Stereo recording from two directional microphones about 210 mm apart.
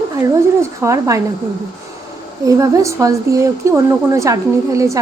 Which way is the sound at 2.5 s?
15° right (ahead or behind).